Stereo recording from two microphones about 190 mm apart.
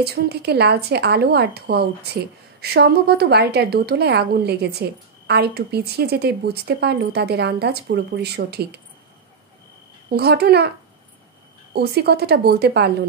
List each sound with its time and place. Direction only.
0.0 s speech: 55° right (ahead or behind)
10.0 s speech: 60° right (ahead or behind)
11.7 s speech: 60° right (ahead or behind)